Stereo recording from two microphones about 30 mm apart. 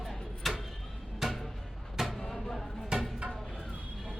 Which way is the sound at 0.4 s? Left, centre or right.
Centre.